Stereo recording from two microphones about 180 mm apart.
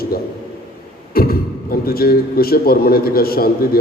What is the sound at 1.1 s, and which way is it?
A man's voice, 55° left (ahead or behind).